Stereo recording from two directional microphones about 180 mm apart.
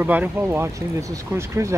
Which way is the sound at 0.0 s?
10° right (ahead or behind).